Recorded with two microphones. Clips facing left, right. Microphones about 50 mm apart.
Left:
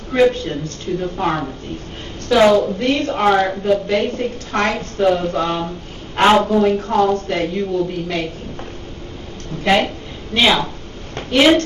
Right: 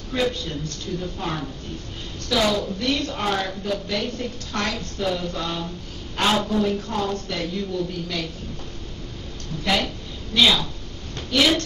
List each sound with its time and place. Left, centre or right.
0.1 s speech: left
9.6 s a woman's voice: left